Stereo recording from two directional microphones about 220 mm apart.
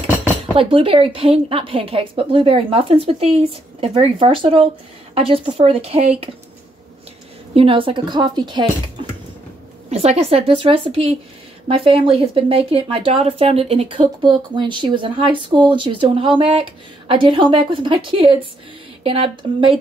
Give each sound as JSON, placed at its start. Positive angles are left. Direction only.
{"t": 0.6, "sound": "a woman's voice", "side_deg": -25}
{"t": 7.5, "sound": "a woman's voice", "side_deg": -25}
{"t": 9.8, "sound": "a woman's voice", "side_deg": -30}